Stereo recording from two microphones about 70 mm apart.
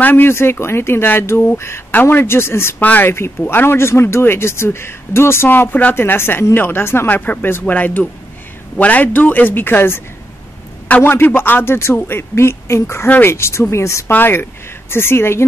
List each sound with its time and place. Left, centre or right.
0.0 s speech: left
2.8 s speech: left
7.2 s a man's voice: left
14.1 s speech: left